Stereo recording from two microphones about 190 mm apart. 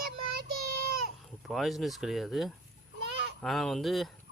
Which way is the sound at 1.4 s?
Centre (ahead or behind).